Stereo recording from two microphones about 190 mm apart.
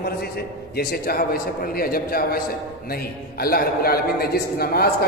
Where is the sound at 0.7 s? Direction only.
55° left (ahead or behind).